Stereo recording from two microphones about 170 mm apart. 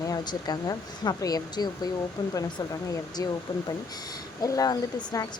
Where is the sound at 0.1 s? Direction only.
25° left (ahead or behind).